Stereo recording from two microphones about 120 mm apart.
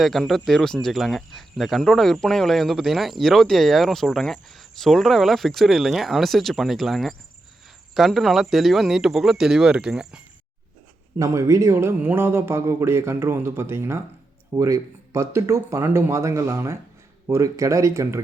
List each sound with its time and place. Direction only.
0.0 s speech: centre (ahead or behind)
11.2 s speech: 25° right (ahead or behind)